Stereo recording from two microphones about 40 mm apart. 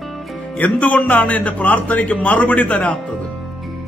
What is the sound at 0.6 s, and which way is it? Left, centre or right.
A man's voice, left.